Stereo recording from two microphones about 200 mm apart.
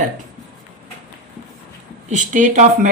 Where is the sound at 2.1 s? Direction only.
40° right (ahead or behind).